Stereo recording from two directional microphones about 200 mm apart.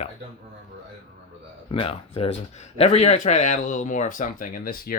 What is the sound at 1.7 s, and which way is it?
Speech, 30° left (ahead or behind).